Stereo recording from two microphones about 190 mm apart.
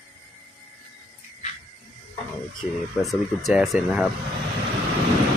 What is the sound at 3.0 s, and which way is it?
Speech, centre (ahead or behind).